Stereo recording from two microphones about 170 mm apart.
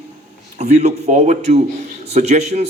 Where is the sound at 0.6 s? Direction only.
40° right (ahead or behind).